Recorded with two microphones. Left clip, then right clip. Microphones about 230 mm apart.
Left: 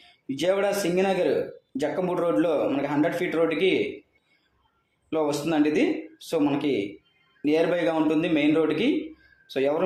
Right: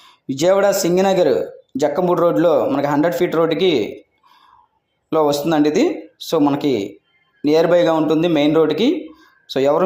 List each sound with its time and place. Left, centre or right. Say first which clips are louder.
0.3 s a man's voice: right 9 dB; right
5.0 s a man's voice: right 9 dB; right